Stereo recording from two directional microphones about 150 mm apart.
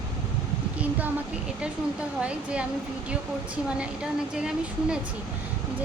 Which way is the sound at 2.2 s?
5° right (ahead or behind).